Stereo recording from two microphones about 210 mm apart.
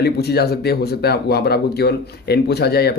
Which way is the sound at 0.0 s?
50° left (ahead or behind).